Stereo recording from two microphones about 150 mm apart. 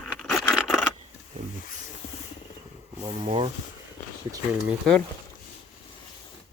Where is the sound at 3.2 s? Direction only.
40° right (ahead or behind).